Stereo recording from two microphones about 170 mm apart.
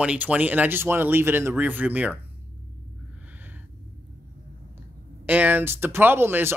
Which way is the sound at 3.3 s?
10° right (ahead or behind).